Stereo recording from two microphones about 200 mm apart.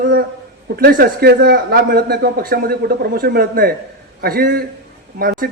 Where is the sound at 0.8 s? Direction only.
45° right (ahead or behind).